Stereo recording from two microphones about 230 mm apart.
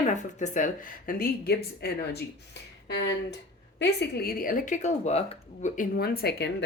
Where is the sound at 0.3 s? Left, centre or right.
Left.